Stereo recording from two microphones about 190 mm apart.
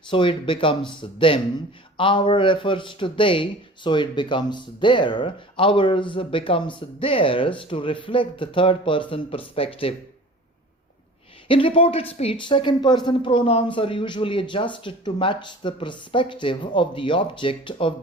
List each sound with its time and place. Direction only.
0.1 s speech: 25° left (ahead or behind)
11.4 s speech: 30° left (ahead or behind)